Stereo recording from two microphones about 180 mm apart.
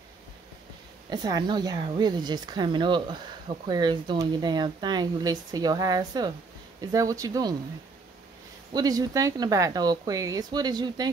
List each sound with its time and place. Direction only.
1.1 s speech: 20° right (ahead or behind)
8.7 s speech: 20° right (ahead or behind)